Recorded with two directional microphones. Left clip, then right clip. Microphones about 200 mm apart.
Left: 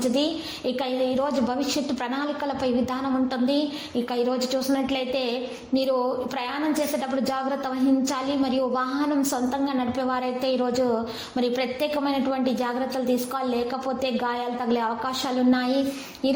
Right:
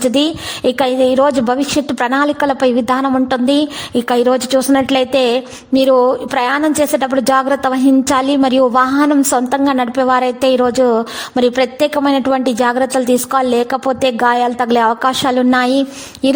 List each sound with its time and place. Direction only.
0.0 s a woman's voice: 55° right (ahead or behind)